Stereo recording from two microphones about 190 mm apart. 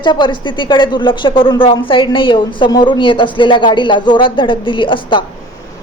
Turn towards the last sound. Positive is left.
turn(degrees=25)  # may be behind; listen again after turning